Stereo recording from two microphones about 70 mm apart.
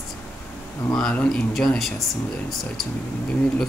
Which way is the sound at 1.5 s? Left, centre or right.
Centre.